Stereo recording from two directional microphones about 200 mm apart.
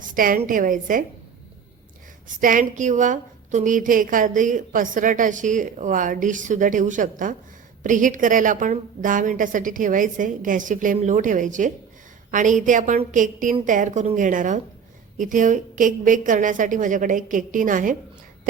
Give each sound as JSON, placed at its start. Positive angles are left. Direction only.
{"t": 0.1, "sound": "a woman's voice", "side_deg": -45}
{"t": 2.2, "sound": "a woman's voice", "side_deg": -40}